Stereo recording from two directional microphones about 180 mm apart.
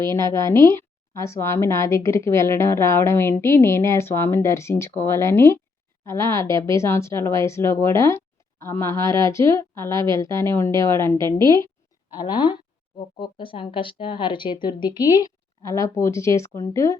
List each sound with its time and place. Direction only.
0.0 s a woman's voice: 15° left (ahead or behind)